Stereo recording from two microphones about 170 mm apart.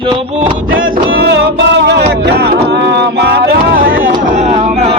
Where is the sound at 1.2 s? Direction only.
90° right; by 4.1 s 60° right (ahead or behind).